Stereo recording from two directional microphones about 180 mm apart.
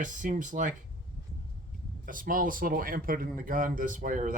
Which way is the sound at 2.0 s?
50° right (ahead or behind).